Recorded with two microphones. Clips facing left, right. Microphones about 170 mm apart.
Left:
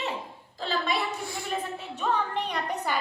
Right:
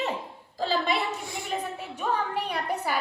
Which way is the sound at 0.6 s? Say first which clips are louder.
Right 2 dB; 30° right (ahead or behind).